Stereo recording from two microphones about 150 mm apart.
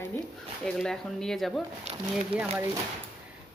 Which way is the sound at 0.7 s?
5° left (ahead or behind).